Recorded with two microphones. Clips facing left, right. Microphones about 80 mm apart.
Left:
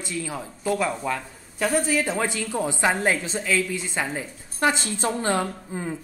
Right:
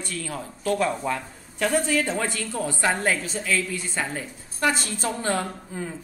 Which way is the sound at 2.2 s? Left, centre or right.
Centre.